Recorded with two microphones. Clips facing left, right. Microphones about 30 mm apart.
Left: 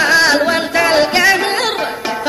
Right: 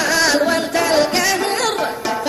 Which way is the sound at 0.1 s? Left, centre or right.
Left.